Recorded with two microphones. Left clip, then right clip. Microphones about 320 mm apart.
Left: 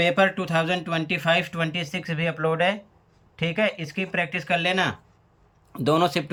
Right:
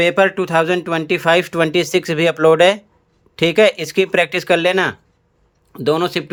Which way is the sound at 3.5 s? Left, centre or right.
Centre.